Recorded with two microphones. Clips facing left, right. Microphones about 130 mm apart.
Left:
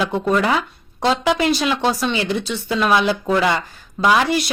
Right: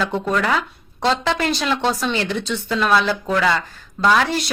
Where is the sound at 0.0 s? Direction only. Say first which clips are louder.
Left 2 dB; 10° left (ahead or behind).